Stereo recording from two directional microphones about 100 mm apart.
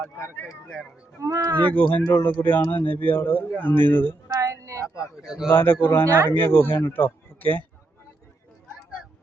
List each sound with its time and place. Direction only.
1.2 s speech: 35° right (ahead or behind)
1.5 s speech: 15° left (ahead or behind)
4.3 s a sound: 35° right (ahead or behind)
5.2 s speech: 5° right (ahead or behind)
5.5 s speech: 20° left (ahead or behind)